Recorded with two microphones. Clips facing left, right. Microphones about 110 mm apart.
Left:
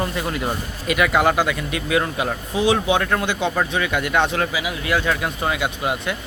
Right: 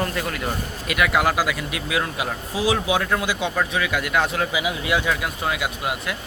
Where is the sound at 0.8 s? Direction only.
Centre (ahead or behind).